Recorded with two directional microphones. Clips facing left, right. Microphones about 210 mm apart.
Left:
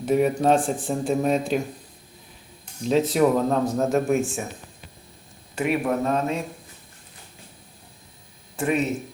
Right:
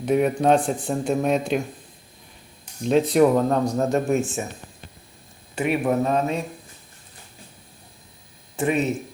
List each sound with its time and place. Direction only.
0.0 s a man's voice: centre (ahead or behind)
2.8 s a man's voice: centre (ahead or behind)
5.5 s a man's voice: centre (ahead or behind)
8.5 s speech: 5° right (ahead or behind)